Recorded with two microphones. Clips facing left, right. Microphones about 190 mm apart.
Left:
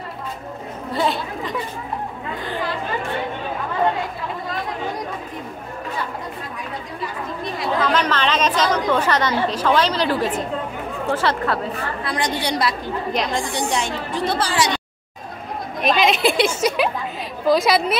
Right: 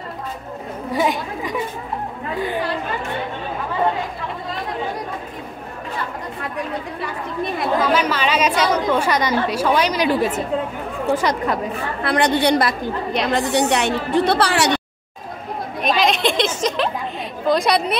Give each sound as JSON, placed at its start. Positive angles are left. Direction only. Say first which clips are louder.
{"t": 0.9, "sound": "chatter", "louder": "right 1 dB", "side_deg": -15}
{"t": 7.8, "sound": "a woman's voice", "louder": "left 1 dB", "side_deg": -10}
{"t": 12.0, "sound": "speech", "louder": "right 8 dB", "side_deg": -60}
{"t": 15.8, "sound": "a sound", "louder": "left 1 dB", "side_deg": 0}
{"t": 17.5, "sound": "a woman's voice", "louder": "left 1 dB", "side_deg": 0}